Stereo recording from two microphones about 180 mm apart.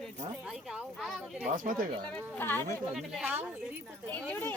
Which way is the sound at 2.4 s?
10° left (ahead or behind).